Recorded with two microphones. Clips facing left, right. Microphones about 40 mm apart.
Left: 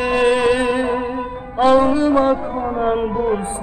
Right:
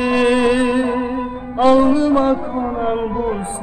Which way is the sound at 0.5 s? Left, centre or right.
Centre.